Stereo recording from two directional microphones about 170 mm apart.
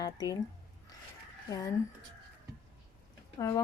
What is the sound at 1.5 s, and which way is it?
Speech, 20° left (ahead or behind).